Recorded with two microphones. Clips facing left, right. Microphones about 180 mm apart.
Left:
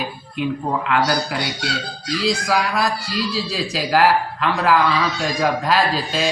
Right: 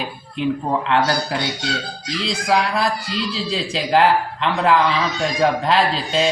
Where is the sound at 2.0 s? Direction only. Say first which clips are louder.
Left 1 dB; 25° right (ahead or behind).